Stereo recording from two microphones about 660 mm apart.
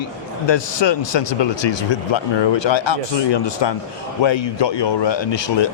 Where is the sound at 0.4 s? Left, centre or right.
Left.